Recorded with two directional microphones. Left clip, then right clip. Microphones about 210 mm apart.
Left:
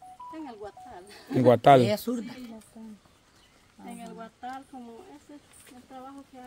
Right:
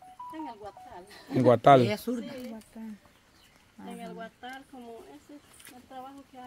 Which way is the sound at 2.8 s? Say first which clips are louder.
Right 3 dB; 75° right (ahead or behind).